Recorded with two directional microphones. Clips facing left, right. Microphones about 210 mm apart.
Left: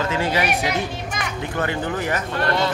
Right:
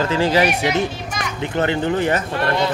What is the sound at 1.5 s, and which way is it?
Speech, 25° right (ahead or behind).